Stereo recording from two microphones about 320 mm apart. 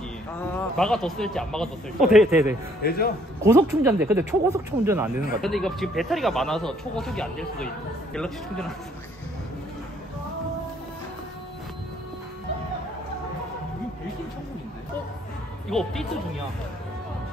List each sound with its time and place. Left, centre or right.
0.4 s speech: centre
2.8 s a man's voice: left
3.4 s speech: centre
15.7 s speech: centre